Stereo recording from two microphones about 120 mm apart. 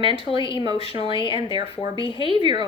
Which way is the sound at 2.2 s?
40° right (ahead or behind).